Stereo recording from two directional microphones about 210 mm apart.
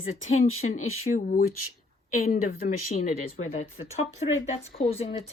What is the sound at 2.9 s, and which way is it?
Speech, 35° left (ahead or behind).